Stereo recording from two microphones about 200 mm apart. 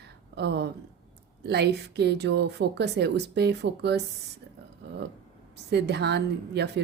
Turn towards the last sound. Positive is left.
turn(degrees=-55)  # may be behind; listen again after turning